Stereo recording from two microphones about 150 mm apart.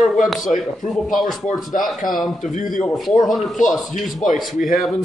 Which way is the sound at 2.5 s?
65° left (ahead or behind).